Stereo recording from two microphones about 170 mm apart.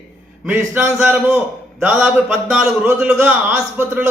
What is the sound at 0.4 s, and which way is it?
A man's voice, 10° right (ahead or behind).